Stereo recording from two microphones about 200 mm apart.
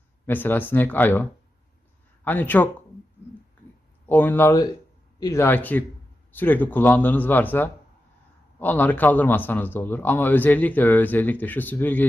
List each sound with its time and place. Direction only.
0.3 s a man's voice: 10° left (ahead or behind)
4.0 s a man's voice: 10° left (ahead or behind)